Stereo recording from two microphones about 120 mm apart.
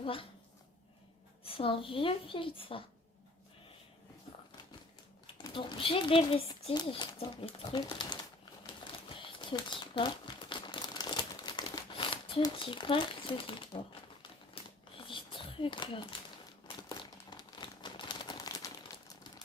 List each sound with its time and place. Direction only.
0.0 s speech: 50° left (ahead or behind)
1.5 s a woman's voice: 50° left (ahead or behind)
5.5 s a woman's voice: 45° left (ahead or behind)
6.7 s a woman's voice: 40° left (ahead or behind)
7.8 s typewriter: 35° left (ahead or behind)
8.9 s crumpling: 45° left (ahead or behind)
12.5 s a woman's voice: 45° left (ahead or behind)
14.2 s crumpling: 45° left (ahead or behind); by 18.7 s 30° left (ahead or behind)